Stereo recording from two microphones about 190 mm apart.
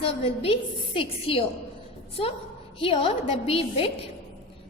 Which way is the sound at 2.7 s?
30° left (ahead or behind).